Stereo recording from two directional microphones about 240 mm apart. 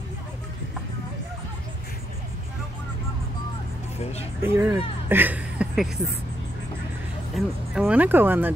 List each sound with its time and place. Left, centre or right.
4.0 s music: left
4.4 s speech: centre
7.3 s speech: centre